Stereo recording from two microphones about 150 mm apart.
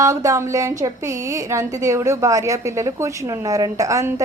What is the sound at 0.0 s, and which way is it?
A woman's voice, 20° right (ahead or behind).